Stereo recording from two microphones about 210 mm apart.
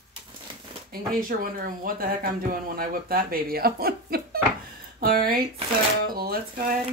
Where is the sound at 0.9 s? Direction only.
45° right (ahead or behind).